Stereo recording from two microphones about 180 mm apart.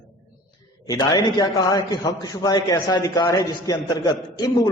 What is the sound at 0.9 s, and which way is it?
A man's voice, 20° left (ahead or behind).